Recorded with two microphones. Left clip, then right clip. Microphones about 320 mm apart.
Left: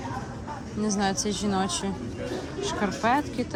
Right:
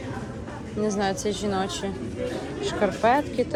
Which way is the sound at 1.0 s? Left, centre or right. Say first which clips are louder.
Left 2 dB; centre.